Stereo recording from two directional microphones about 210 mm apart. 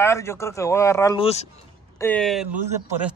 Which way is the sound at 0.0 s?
15° left (ahead or behind).